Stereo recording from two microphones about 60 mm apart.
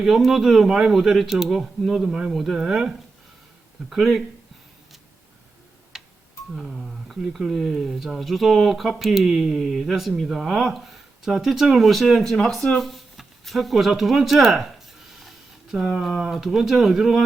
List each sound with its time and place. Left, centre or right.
0.0 s speech: centre
5.9 s tick-tock: centre
6.5 s speech: centre
15.1 s a sound: centre
16.4 s speech: centre